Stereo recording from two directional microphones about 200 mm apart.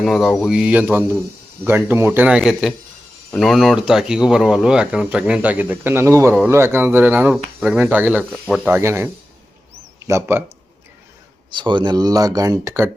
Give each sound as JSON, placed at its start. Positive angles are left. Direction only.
{"t": 0.0, "sound": "speech", "side_deg": 0}
{"t": 10.1, "sound": "speech", "side_deg": -10}
{"t": 11.5, "sound": "speech", "side_deg": -25}